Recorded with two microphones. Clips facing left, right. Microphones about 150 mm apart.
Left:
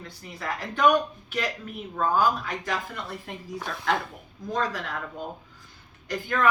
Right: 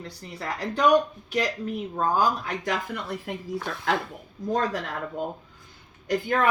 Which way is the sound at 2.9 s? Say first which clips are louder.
Right 4 dB; 50° right (ahead or behind).